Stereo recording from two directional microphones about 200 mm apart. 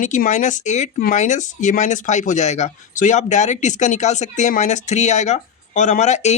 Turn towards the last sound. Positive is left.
turn(degrees=35)  # may be behind; listen again after turning